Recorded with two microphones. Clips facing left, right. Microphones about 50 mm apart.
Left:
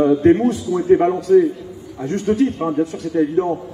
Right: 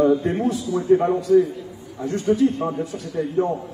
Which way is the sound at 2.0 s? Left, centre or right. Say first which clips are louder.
Left 1 dB; left.